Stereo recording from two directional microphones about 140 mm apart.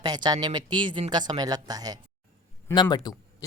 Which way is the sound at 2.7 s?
30° left (ahead or behind).